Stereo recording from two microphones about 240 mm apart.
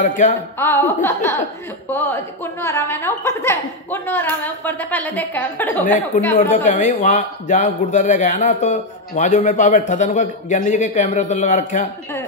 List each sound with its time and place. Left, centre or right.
0.0 s speech: left
0.6 s a woman's voice: centre
6.5 s speech: left